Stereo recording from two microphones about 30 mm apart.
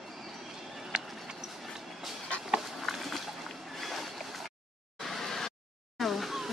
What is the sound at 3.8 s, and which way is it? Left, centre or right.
Boat, centre.